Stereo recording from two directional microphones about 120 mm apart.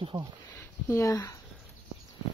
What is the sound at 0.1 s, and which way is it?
Speech, 35° right (ahead or behind).